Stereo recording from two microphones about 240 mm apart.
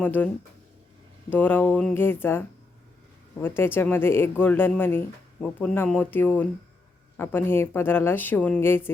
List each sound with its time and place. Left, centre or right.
0.0 s speech: centre
1.3 s speech: centre